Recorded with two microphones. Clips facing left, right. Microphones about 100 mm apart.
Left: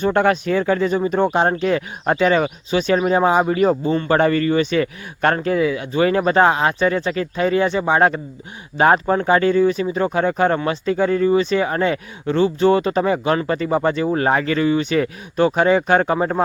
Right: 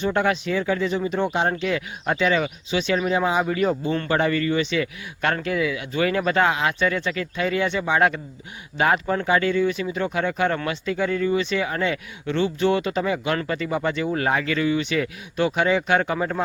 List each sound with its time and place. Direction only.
0.0 s speech: 50° left (ahead or behind)